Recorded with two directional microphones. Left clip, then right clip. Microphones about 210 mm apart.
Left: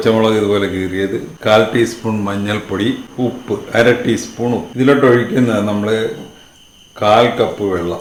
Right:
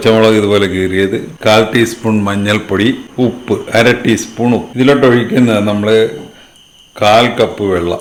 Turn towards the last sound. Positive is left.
turn(degrees=-40)  # may be behind; listen again after turning